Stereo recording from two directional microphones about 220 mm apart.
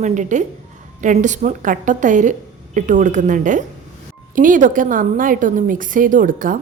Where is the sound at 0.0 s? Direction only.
35° right (ahead or behind).